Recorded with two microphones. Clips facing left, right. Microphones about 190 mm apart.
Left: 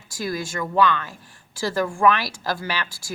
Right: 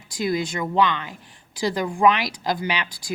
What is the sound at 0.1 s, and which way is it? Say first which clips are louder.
Speech: right 4 dB; 20° right (ahead or behind).